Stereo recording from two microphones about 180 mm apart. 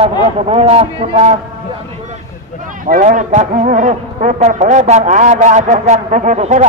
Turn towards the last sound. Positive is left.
turn(degrees=-40)  # may be behind; listen again after turning